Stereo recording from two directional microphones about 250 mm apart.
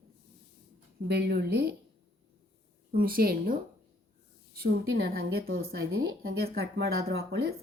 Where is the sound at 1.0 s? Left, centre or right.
Right.